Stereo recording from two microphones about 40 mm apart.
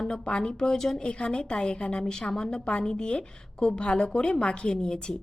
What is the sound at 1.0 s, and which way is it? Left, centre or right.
A woman's voice, left.